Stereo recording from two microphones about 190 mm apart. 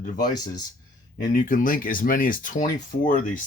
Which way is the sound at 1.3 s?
45° left (ahead or behind).